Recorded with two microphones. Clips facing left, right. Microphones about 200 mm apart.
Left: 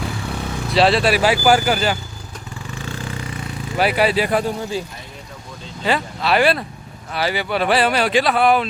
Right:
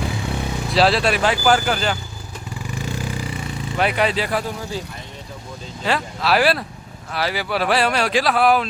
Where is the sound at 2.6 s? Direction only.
10° right (ahead or behind).